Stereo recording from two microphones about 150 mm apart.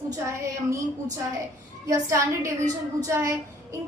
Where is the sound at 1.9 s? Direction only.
20° right (ahead or behind).